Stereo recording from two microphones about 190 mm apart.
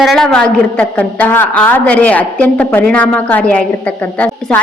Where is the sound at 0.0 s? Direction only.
Centre (ahead or behind).